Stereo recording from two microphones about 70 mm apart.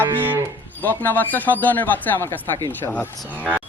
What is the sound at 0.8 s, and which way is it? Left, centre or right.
Speech, left.